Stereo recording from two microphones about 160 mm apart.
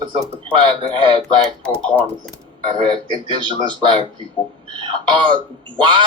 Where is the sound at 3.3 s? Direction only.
30° right (ahead or behind).